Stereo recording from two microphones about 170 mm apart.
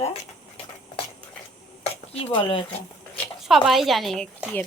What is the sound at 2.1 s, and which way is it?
Speech, 35° left (ahead or behind).